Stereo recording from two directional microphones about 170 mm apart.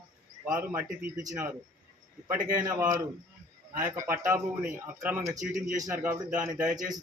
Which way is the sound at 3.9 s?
15° right (ahead or behind).